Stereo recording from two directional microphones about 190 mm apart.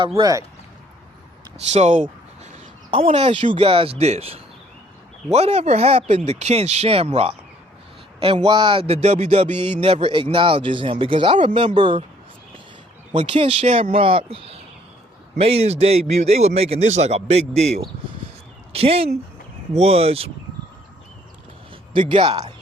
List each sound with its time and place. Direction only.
0.2 s speech: 20° right (ahead or behind)
1.6 s speech: 40° right (ahead or behind)
13.1 s speech: 30° right (ahead or behind)
18.7 s speech: 30° right (ahead or behind)
22.1 s speech: 25° right (ahead or behind)